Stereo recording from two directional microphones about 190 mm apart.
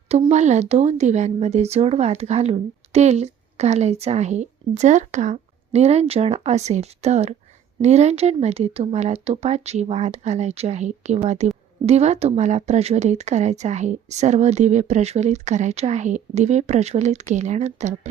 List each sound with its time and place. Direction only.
0.1 s speech: 35° right (ahead or behind)